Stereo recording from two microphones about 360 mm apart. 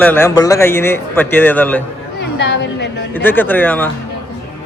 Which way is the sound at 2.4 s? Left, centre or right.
Left.